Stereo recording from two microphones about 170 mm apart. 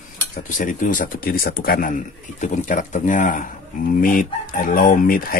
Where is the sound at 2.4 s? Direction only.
45° left (ahead or behind).